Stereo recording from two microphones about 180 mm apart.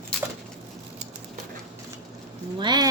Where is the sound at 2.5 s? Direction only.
25° right (ahead or behind).